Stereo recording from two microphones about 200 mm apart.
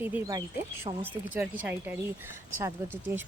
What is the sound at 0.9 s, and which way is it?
Speech, 20° right (ahead or behind).